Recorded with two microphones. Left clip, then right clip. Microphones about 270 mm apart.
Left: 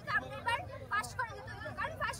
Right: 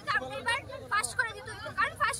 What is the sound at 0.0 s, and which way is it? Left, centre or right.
Vehicle, centre.